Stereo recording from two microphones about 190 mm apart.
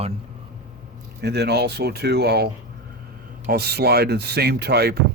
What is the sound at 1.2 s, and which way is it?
Speech, 60° right (ahead or behind).